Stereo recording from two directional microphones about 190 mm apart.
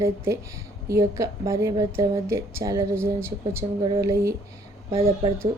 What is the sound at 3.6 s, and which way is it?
Speech, 25° right (ahead or behind).